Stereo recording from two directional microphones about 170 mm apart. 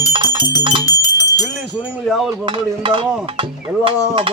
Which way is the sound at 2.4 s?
30° right (ahead or behind).